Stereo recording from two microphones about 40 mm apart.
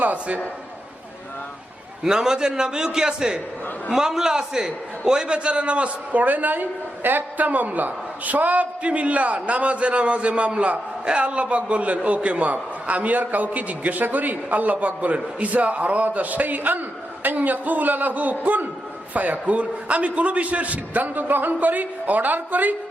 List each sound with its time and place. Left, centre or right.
0.0 s a man's voice: right
2.0 s a man's voice: centre; by 22.7 s right